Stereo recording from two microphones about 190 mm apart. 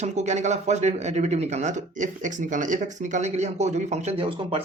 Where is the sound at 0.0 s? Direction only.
35° right (ahead or behind).